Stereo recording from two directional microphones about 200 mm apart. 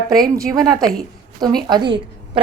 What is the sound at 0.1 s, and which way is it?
A woman's voice, 20° right (ahead or behind).